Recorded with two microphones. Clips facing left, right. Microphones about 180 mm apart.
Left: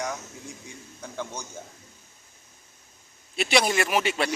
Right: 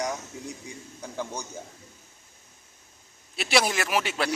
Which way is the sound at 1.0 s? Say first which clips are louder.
Right 1 dB; 10° right (ahead or behind).